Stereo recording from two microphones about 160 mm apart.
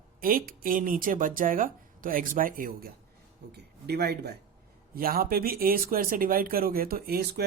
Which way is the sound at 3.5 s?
90° right.